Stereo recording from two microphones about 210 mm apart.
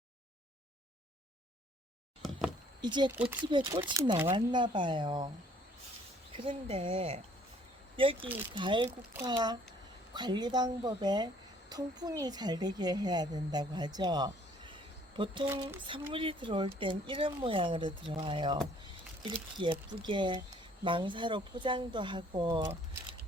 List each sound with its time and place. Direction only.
2.8 s speech: 20° right (ahead or behind)
3.1 s speech: 10° right (ahead or behind)
3.4 s speech: 20° right (ahead or behind)
6.3 s a woman's voice: 25° right (ahead or behind)